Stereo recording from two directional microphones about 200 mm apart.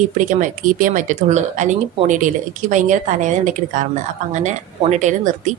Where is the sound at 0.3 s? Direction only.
40° right (ahead or behind).